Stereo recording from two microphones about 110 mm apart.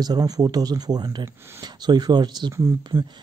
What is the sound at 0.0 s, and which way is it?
Speech, 35° right (ahead or behind).